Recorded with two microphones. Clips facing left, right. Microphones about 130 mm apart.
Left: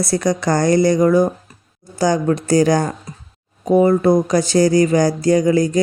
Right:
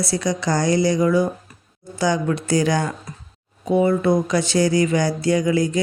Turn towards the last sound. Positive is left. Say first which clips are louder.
# left 4 dB
turn(degrees=40)  # may be behind; listen again after turning